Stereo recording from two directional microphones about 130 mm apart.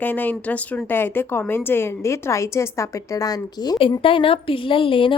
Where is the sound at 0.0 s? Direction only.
15° left (ahead or behind).